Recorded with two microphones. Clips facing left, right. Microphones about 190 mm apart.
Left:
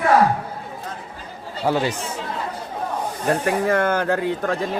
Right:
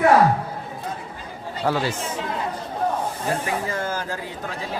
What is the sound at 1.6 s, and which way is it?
Speech, 15° left (ahead or behind).